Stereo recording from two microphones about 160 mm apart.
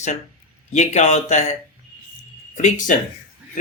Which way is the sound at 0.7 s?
45° left (ahead or behind).